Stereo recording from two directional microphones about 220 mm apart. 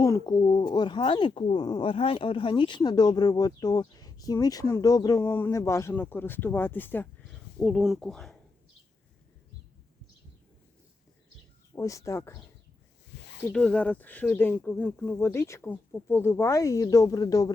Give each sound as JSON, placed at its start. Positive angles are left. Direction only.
{"t": 0.0, "sound": "speech", "side_deg": 15}
{"t": 11.7, "sound": "speech", "side_deg": 15}
{"t": 13.1, "sound": "a sound", "side_deg": 55}
{"t": 13.5, "sound": "speech", "side_deg": 5}